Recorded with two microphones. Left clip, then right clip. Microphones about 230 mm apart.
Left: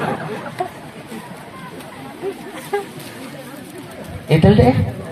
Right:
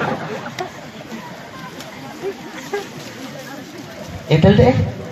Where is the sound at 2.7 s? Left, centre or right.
Left.